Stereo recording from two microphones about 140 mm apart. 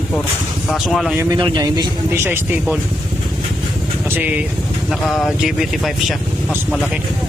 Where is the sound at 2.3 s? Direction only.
15° right (ahead or behind).